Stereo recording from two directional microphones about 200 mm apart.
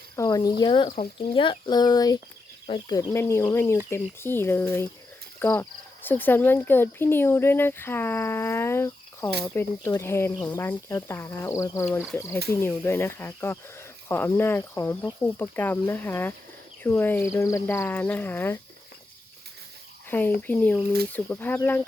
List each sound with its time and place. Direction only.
0.2 s speech: 20° left (ahead or behind)
20.1 s speech: 10° left (ahead or behind)